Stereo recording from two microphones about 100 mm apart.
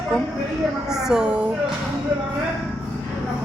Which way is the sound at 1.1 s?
10° right (ahead or behind).